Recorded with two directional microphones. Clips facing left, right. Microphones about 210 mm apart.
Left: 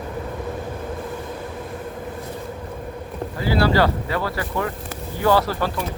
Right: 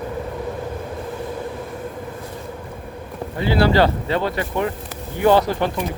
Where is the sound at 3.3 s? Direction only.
25° right (ahead or behind).